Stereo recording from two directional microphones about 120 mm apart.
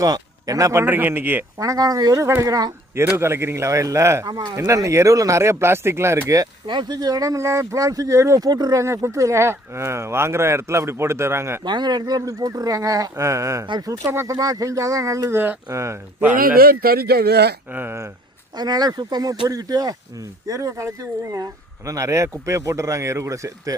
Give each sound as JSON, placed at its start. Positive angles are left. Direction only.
{"t": 0.0, "sound": "speech", "side_deg": -30}
{"t": 1.5, "sound": "speech", "side_deg": -30}
{"t": 11.6, "sound": "speech", "side_deg": -35}
{"t": 17.7, "sound": "speech", "side_deg": -15}
{"t": 18.5, "sound": "speech", "side_deg": -35}